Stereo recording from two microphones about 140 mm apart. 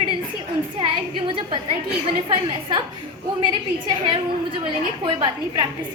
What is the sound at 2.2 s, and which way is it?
Speech, 35° right (ahead or behind).